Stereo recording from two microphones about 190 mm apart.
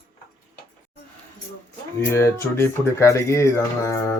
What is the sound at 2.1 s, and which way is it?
Speech, 15° left (ahead or behind).